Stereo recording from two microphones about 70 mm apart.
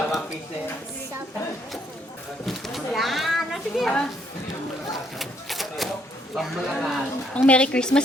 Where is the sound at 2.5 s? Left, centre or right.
Centre.